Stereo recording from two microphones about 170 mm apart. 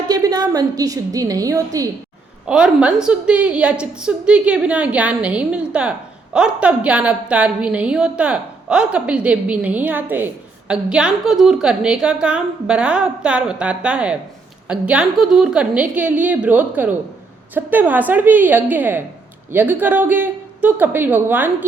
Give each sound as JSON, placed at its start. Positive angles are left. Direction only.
{"t": 0.1, "sound": "a woman's voice", "side_deg": -20}
{"t": 2.5, "sound": "a woman's voice", "side_deg": -5}